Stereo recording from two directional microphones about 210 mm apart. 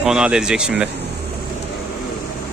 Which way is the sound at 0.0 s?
5° right (ahead or behind).